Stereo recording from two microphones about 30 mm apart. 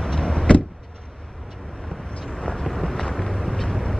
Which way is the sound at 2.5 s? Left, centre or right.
Centre.